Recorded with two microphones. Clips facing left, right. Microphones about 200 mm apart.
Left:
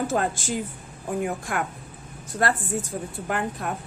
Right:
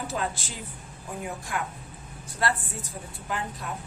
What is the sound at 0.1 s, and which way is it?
A woman's voice, 50° left (ahead or behind).